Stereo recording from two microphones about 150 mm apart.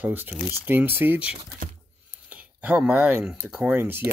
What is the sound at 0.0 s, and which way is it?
Speech, 10° right (ahead or behind).